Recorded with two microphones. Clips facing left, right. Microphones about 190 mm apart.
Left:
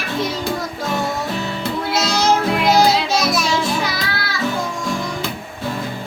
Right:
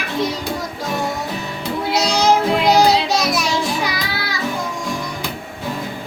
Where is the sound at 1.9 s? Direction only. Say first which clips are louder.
Right 2 dB; 15° right (ahead or behind).